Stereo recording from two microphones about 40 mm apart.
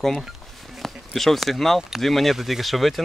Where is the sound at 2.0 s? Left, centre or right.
Centre.